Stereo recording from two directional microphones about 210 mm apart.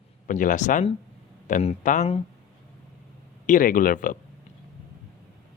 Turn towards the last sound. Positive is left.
turn(degrees=40)  # may be behind; listen again after turning